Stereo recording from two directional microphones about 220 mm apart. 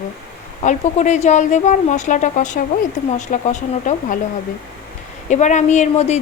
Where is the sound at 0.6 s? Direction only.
35° left (ahead or behind).